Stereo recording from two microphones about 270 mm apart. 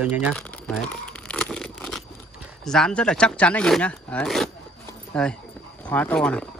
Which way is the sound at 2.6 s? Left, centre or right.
Centre.